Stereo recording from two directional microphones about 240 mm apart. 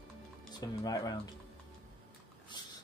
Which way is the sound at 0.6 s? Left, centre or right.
Centre.